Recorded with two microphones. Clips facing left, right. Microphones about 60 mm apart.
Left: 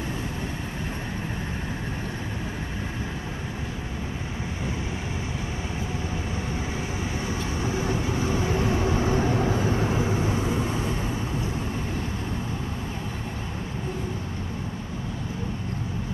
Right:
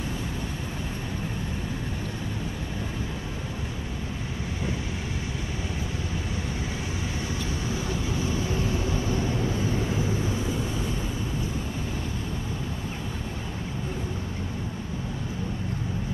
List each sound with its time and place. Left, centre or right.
7.7 s vehicle: left